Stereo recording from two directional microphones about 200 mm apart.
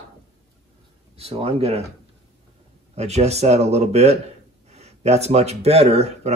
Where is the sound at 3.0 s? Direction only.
35° right (ahead or behind).